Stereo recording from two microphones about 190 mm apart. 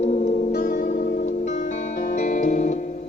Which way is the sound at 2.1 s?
40° left (ahead or behind).